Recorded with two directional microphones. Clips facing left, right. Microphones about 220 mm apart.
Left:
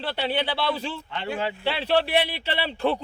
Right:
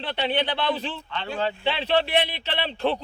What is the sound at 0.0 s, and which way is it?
Speech, 10° left (ahead or behind).